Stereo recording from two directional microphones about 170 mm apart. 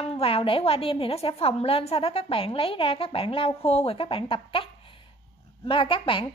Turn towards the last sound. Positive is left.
turn(degrees=30)  # may be behind; listen again after turning